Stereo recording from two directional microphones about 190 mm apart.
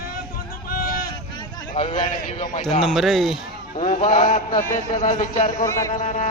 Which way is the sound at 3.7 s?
40° left (ahead or behind).